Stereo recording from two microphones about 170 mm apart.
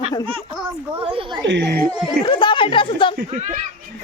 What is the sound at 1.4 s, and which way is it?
Speech, 90° right.